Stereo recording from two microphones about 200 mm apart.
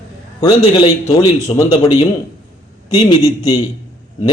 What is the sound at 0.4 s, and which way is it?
A man's voice, 25° left (ahead or behind).